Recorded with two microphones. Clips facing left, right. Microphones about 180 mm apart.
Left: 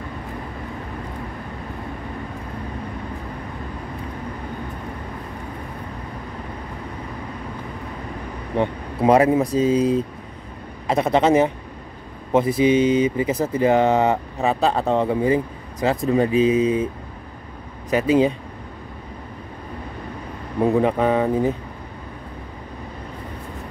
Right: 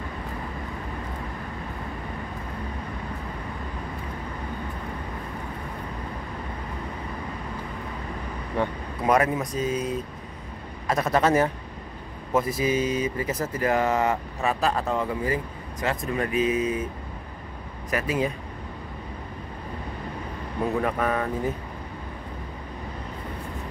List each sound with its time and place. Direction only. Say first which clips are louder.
8.5 s speech: left 6 dB; 25° left (ahead or behind)
17.8 s speech: left 9 dB; 30° left (ahead or behind)
20.8 s speech: left 7 dB; 20° left (ahead or behind)